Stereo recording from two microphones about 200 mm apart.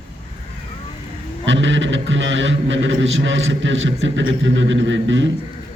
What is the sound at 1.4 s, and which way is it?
A man's voice, 70° right (ahead or behind).